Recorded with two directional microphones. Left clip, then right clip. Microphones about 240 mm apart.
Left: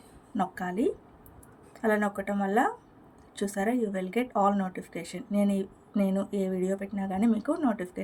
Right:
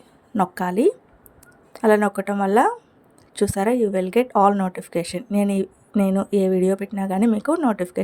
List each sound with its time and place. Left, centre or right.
0.3 s speech: right